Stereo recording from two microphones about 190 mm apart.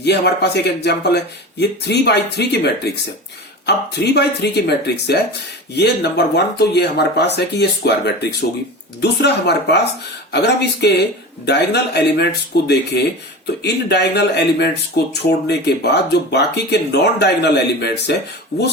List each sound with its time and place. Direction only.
0.0 s speech: 60° left (ahead or behind)